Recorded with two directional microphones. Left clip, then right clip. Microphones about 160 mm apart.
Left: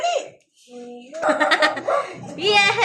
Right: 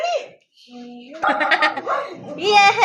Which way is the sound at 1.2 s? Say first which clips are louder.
Even; centre (ahead or behind).